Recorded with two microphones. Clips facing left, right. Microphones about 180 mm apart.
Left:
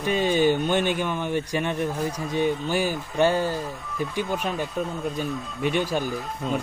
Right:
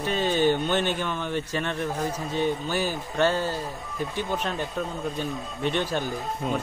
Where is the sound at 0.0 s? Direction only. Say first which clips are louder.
Left 2 dB; 15° left (ahead or behind).